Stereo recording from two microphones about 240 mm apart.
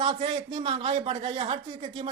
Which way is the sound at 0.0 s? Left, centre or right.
Right.